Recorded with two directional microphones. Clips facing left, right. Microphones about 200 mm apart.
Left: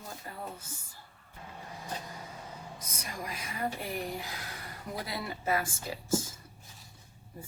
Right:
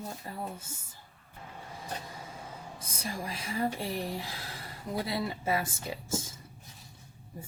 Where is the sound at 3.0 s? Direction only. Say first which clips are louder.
Right 4 dB; 30° right (ahead or behind).